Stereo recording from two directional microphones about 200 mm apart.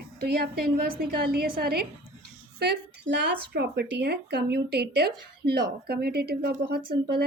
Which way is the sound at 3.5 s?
55° right (ahead or behind).